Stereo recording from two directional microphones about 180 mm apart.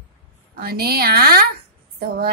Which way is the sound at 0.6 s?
60° right (ahead or behind).